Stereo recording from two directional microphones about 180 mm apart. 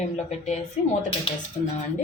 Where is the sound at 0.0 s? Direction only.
40° left (ahead or behind).